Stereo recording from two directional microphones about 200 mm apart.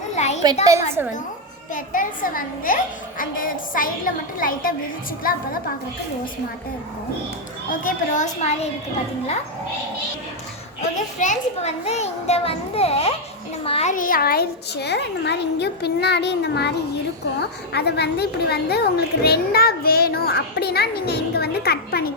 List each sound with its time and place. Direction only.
0.2 s a sound: 35° left (ahead or behind)
1.0 s a woman's voice: 10° right (ahead or behind)
1.7 s a woman's voice: 40° left (ahead or behind)
7.7 s a child's voice: 40° left (ahead or behind)
10.8 s a child's voice: 35° left (ahead or behind)
13.9 s a child's voice: 45° left (ahead or behind)